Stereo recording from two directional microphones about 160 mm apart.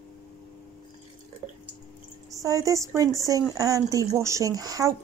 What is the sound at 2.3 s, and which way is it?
Speech, 20° right (ahead or behind).